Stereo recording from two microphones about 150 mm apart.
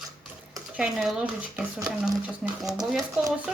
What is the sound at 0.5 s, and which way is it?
Speech, centre (ahead or behind).